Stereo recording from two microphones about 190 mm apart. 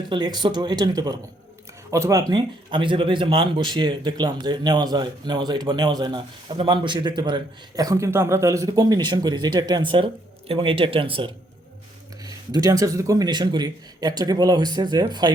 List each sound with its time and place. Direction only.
0.1 s speech: 20° right (ahead or behind)